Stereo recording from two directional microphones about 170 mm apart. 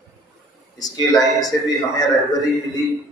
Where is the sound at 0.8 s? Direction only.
20° left (ahead or behind).